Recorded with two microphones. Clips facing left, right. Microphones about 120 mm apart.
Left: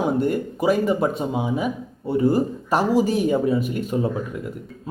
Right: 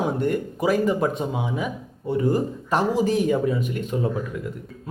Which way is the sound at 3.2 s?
25° left (ahead or behind).